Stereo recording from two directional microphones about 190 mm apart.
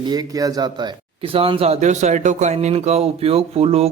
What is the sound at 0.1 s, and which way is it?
Speech, 20° right (ahead or behind).